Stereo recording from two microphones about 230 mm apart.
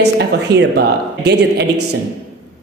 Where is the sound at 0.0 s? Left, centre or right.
Right.